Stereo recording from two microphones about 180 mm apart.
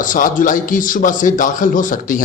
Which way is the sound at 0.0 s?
45° left (ahead or behind).